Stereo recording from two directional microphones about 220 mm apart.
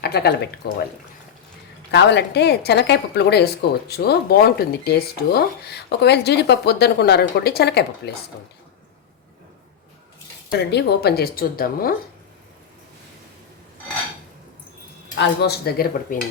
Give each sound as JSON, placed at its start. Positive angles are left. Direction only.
{"t": 0.0, "sound": "a woman's voice", "side_deg": 45}
{"t": 1.9, "sound": "a woman's voice", "side_deg": 50}
{"t": 10.5, "sound": "a woman's voice", "side_deg": 50}
{"t": 15.2, "sound": "a woman's voice", "side_deg": 50}